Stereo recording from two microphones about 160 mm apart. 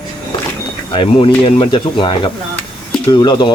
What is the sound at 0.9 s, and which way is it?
Speech, 35° left (ahead or behind).